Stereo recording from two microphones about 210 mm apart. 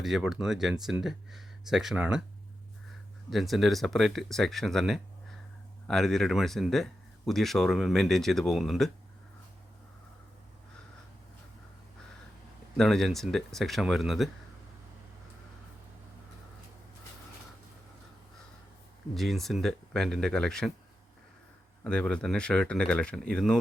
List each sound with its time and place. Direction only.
0.0 s speech: centre (ahead or behind)
3.2 s speech: centre (ahead or behind)
12.7 s speech: centre (ahead or behind)
19.1 s speech: centre (ahead or behind)
21.8 s speech: 5° left (ahead or behind)